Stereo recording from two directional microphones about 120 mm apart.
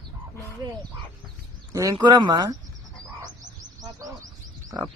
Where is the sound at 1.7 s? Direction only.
25° right (ahead or behind).